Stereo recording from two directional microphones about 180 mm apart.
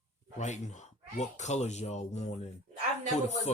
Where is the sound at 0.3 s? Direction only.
40° left (ahead or behind).